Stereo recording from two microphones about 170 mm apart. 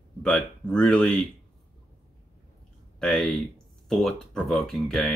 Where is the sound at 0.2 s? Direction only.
5° left (ahead or behind).